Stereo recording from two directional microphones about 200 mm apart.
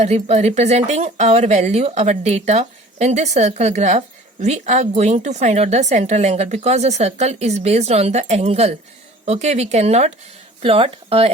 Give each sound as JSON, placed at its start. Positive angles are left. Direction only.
{"t": 0.0, "sound": "speech", "side_deg": -35}